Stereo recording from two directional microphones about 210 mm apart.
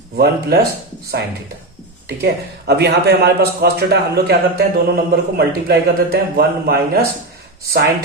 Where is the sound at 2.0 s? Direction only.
50° right (ahead or behind).